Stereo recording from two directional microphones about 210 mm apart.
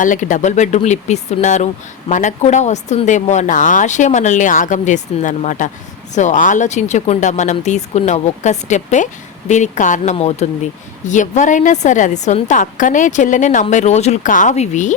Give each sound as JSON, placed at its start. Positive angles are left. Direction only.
{"t": 0.0, "sound": "speech", "side_deg": 35}